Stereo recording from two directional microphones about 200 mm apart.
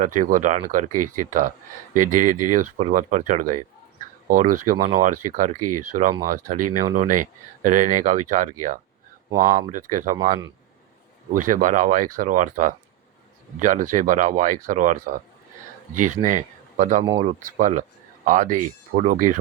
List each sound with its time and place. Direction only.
0.0 s speech: 40° right (ahead or behind)
11.3 s speech: 40° right (ahead or behind)